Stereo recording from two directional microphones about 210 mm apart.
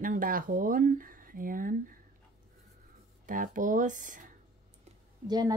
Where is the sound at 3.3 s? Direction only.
40° right (ahead or behind).